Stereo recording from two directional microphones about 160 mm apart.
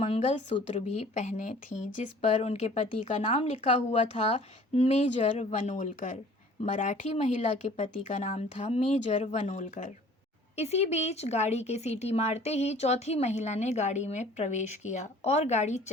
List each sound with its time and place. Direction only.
0.0 s speech: 45° left (ahead or behind)